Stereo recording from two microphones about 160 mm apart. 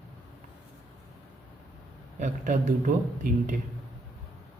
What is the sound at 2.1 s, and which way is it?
Speech, 50° right (ahead or behind).